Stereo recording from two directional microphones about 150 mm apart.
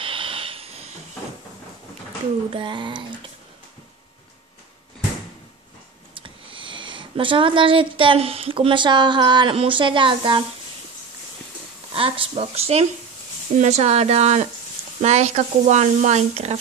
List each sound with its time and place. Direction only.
0.0 s hiss: 35° right (ahead or behind)
2.5 s speech: 30° right (ahead or behind)
6.1 s speech: 35° right (ahead or behind)
11.9 s speech: 40° right (ahead or behind)